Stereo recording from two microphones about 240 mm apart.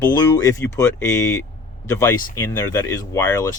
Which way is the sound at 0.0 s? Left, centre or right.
Centre.